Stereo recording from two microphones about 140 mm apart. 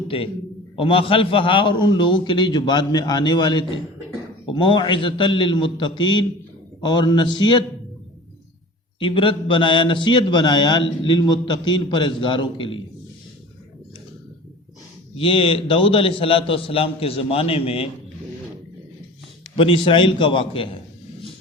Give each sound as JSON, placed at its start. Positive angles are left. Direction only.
{"t": 0.1, "sound": "a man's voice", "side_deg": 40}
{"t": 9.0, "sound": "a man's voice", "side_deg": 40}
{"t": 15.1, "sound": "a man's voice", "side_deg": 40}
{"t": 19.5, "sound": "a man's voice", "side_deg": 40}